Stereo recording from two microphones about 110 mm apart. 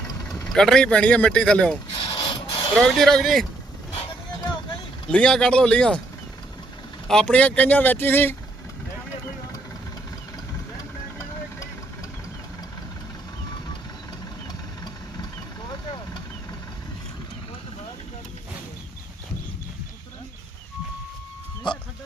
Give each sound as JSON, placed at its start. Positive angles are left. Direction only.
{"t": 0.4, "sound": "speech", "side_deg": 5}
{"t": 1.9, "sound": "rub", "side_deg": 50}
{"t": 2.7, "sound": "speech", "side_deg": 5}
{"t": 5.0, "sound": "speech", "side_deg": 10}
{"t": 7.1, "sound": "speech", "side_deg": 10}
{"t": 21.7, "sound": "dog", "side_deg": 45}